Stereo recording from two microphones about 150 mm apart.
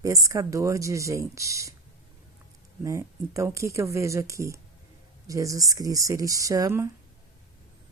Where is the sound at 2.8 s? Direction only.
20° right (ahead or behind).